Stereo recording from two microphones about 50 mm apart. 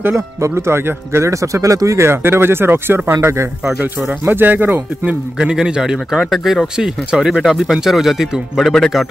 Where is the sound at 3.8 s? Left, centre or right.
Right.